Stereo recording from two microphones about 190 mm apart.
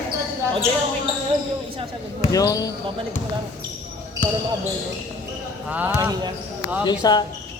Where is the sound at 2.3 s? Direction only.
20° left (ahead or behind).